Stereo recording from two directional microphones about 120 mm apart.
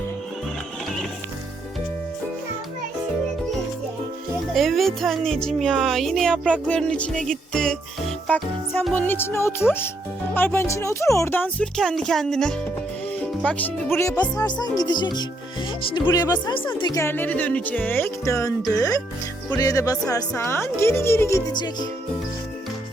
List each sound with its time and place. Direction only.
4.5 s speech: centre (ahead or behind)
6.5 s music: 10° left (ahead or behind)
9.0 s speech: 15° left (ahead or behind)
14.0 s a woman's voice: 25° left (ahead or behind); by 16.9 s 45° left (ahead or behind)
16.9 s speech: 20° left (ahead or behind)
21.5 s speech: 35° left (ahead or behind)